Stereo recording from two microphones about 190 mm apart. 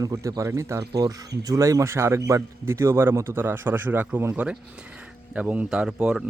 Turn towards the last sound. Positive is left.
turn(degrees=-5)  # may be behind; listen again after turning